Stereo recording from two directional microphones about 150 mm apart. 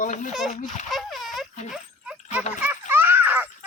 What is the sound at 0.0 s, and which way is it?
Speech, 55° left (ahead or behind).